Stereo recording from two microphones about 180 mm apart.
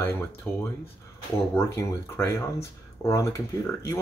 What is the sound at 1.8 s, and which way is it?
Speech, 15° left (ahead or behind).